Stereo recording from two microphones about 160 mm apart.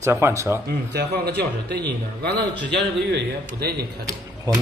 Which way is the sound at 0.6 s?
85° right.